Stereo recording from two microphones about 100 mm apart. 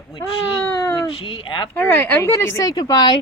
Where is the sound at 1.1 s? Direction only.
60° left (ahead or behind).